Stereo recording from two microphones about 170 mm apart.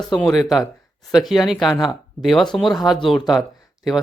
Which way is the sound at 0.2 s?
Centre (ahead or behind).